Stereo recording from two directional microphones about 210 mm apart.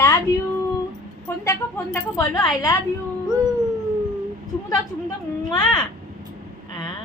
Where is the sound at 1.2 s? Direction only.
15° left (ahead or behind).